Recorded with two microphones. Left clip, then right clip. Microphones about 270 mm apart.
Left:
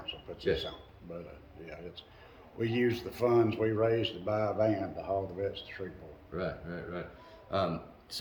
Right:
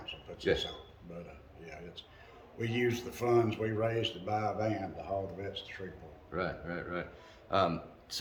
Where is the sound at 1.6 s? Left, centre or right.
Centre.